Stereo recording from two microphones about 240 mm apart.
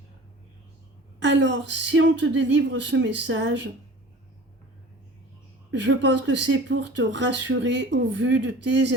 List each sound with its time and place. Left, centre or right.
1.2 s speech: right
5.7 s speech: right